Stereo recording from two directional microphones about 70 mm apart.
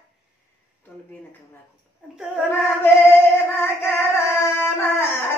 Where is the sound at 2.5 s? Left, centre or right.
Left.